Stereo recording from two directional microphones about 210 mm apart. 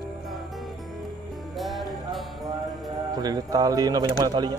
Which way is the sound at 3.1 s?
20° right (ahead or behind).